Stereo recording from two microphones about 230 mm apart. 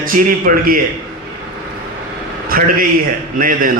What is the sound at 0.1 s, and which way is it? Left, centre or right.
Speech, right.